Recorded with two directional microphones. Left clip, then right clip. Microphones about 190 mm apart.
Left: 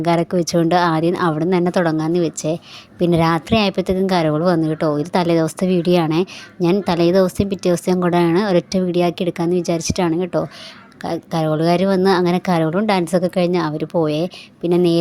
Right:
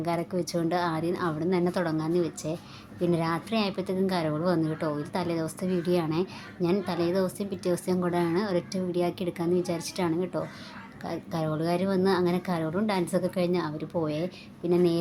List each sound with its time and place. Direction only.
0.0 s a woman's voice: 45° left (ahead or behind)